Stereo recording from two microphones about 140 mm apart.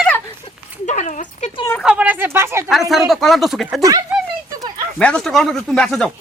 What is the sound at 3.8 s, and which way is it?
Speech, 25° right (ahead or behind).